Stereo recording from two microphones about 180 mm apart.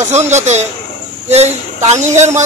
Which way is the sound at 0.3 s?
40° right (ahead or behind).